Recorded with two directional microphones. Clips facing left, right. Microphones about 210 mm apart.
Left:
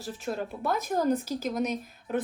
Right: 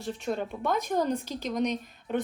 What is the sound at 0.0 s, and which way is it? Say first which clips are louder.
Speech: right 2 dB; centre (ahead or behind).